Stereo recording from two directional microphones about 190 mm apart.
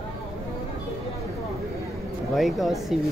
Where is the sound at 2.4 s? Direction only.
Centre (ahead or behind).